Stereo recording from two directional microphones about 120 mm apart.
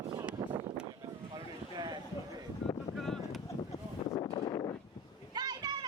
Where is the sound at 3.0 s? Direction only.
Centre (ahead or behind).